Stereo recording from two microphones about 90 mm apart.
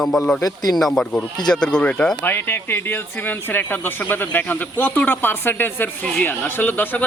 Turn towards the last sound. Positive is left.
turn(degrees=20)  # may be behind; listen again after turning